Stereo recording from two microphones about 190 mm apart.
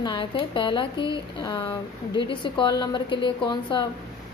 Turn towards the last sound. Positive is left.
turn(degrees=25)  # may be behind; listen again after turning